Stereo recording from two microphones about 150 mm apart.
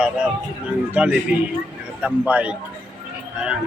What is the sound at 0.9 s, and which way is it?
Speech, 10° right (ahead or behind).